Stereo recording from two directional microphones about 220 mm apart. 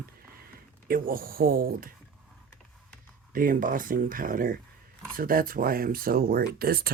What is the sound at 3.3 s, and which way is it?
Speech, 40° right (ahead or behind).